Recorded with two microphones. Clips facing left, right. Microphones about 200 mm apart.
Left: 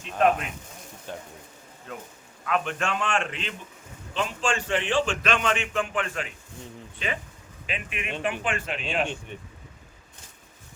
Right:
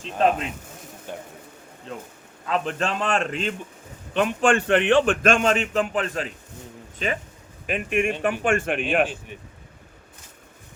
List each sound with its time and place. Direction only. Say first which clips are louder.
0.0 s speech: right 1 dB; 30° right (ahead or behind)
1.9 s a man's voice: right 3 dB; 25° right (ahead or behind)
4.1 s a man's voice: right 8 dB; 60° right (ahead or behind)